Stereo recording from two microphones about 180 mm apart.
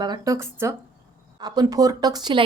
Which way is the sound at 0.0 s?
20° right (ahead or behind).